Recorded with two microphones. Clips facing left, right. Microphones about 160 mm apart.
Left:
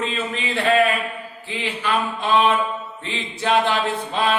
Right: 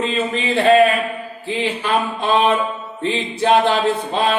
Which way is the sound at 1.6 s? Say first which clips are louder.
Right 3 dB; 35° right (ahead or behind).